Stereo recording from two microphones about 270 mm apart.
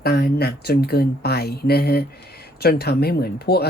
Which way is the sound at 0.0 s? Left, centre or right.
Left.